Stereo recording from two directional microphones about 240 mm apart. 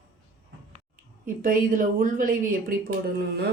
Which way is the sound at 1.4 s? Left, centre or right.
Right.